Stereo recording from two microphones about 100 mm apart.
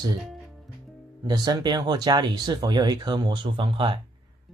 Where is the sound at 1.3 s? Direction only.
40° right (ahead or behind).